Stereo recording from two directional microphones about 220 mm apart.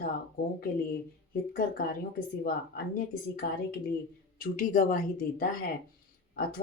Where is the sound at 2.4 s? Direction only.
40° left (ahead or behind).